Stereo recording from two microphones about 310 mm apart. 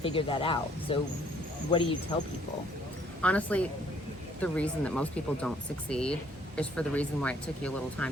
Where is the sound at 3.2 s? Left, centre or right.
Centre.